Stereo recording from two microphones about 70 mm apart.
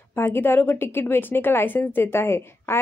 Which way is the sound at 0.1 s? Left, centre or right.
Left.